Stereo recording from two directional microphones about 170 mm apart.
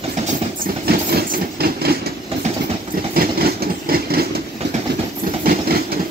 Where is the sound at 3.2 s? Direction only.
60° right (ahead or behind).